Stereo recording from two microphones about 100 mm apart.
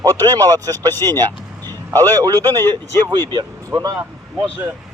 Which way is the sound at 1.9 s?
20° left (ahead or behind).